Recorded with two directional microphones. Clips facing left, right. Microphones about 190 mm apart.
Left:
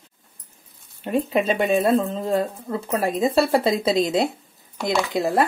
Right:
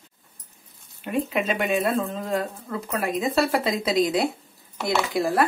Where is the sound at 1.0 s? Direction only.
30° left (ahead or behind).